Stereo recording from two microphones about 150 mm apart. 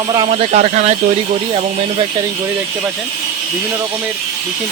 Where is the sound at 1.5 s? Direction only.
40° right (ahead or behind).